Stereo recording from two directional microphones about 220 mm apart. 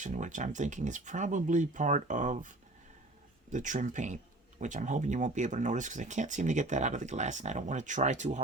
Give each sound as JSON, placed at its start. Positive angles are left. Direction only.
{"t": 0.0, "sound": "speech", "side_deg": -35}
{"t": 3.5, "sound": "speech", "side_deg": -35}